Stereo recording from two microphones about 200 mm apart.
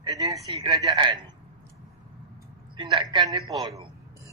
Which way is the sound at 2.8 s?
25° right (ahead or behind).